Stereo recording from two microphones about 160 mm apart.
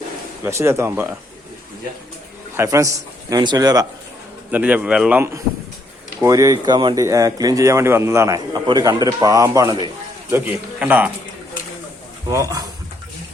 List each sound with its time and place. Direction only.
0.4 s a man's voice: 15° right (ahead or behind)
2.6 s speech: 20° right (ahead or behind)
4.5 s a man's voice: 10° right (ahead or behind); by 9.8 s 25° right (ahead or behind)
10.2 s a man's voice: 10° right (ahead or behind)
12.3 s speech: 20° right (ahead or behind)